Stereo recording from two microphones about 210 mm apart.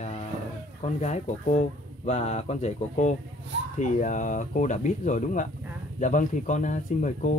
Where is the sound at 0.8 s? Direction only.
35° left (ahead or behind).